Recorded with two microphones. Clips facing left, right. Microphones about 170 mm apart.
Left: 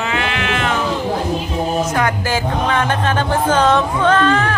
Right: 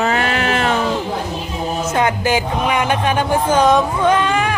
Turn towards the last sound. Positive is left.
turn(degrees=-15)  # may be behind; listen again after turning